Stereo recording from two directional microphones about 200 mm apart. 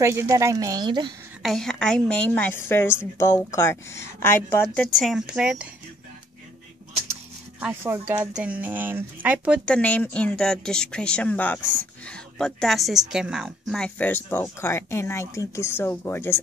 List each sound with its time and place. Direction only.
0.0 s speech: 15° right (ahead or behind)
1.4 s a woman's voice: centre (ahead or behind)
7.6 s speech: 10° right (ahead or behind)
9.7 s a woman's voice: 5° left (ahead or behind)